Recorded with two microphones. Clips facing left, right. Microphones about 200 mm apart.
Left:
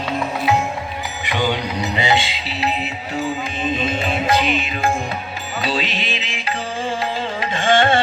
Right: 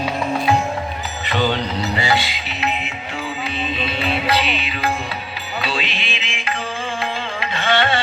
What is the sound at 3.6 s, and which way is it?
Music, 45° left (ahead or behind).